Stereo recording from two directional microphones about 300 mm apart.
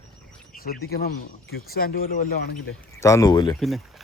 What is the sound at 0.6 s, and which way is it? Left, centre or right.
Speech, left.